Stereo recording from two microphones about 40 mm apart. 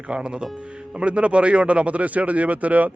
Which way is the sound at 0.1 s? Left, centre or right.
Right.